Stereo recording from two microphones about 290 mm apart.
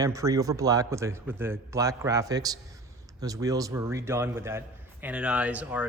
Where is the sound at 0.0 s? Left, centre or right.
Centre.